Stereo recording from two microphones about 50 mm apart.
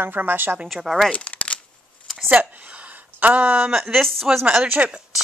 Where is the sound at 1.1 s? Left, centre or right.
Left.